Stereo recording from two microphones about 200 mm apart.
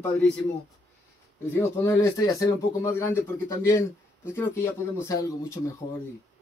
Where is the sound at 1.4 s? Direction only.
15° left (ahead or behind).